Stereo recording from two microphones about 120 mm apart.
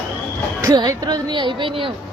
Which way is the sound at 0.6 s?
30° right (ahead or behind).